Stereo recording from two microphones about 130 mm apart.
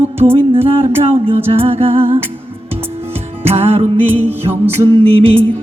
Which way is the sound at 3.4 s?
50° right (ahead or behind).